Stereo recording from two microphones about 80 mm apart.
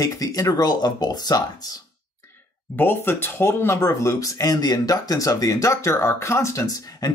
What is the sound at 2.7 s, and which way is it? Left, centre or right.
Speech, left.